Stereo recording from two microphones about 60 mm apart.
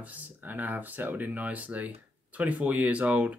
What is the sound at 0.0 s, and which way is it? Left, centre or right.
Speech, right.